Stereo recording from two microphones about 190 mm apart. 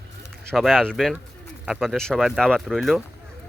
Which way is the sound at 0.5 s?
Centre (ahead or behind).